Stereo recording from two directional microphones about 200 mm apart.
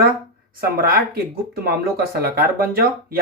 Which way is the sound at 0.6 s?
50° right (ahead or behind).